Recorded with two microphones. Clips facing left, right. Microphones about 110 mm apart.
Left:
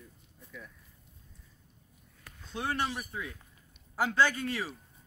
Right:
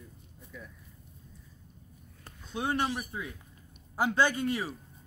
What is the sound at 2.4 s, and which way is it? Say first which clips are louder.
Speech: right 2 dB; 15° right (ahead or behind).